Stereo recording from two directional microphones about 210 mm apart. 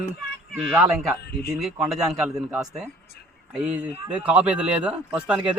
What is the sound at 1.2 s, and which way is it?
Speech, 50° left (ahead or behind).